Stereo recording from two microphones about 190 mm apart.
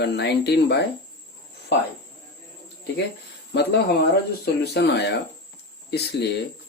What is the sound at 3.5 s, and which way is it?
Speech, 60° left (ahead or behind).